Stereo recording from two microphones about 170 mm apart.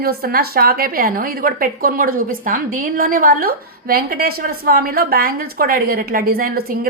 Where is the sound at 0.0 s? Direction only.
65° right (ahead or behind).